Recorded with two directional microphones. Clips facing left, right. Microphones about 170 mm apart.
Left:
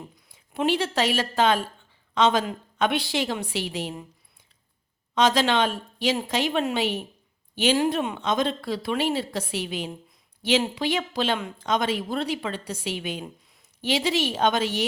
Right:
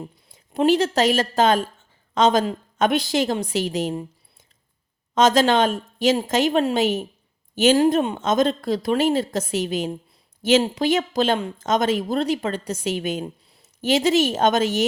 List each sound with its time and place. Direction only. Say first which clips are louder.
0.3 s a woman's voice: right 6 dB; 40° right (ahead or behind)
5.1 s speech: right 4 dB; 45° right (ahead or behind)